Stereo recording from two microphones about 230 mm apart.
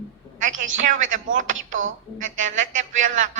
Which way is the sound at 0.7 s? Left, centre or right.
Right.